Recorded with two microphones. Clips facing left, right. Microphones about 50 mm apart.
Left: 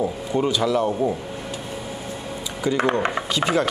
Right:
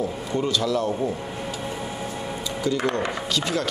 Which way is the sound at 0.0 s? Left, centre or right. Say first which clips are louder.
Left 3 dB; centre.